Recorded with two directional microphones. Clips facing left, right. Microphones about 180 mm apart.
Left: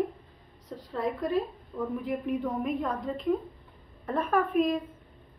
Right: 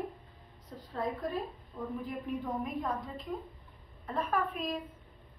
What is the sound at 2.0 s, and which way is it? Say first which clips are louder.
A woman's voice: left 7 dB; 70° left (ahead or behind).